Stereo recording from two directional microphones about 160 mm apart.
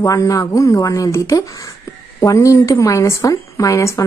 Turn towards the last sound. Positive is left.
turn(degrees=20)  # may be behind; listen again after turning